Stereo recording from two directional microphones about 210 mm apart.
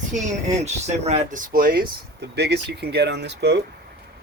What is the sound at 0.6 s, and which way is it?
Speech, 30° right (ahead or behind).